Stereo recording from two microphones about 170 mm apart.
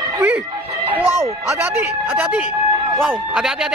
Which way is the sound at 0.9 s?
15° right (ahead or behind).